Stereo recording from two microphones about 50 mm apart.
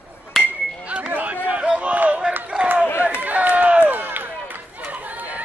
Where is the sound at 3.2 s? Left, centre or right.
Right.